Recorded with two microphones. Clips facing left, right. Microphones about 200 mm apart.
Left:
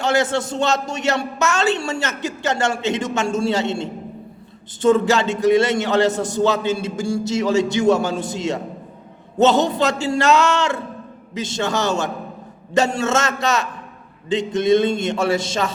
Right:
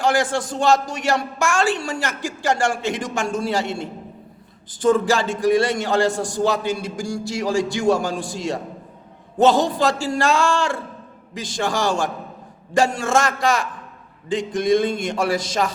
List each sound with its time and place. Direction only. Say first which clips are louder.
0.0 s a man's voice: left 1 dB; 25° left (ahead or behind)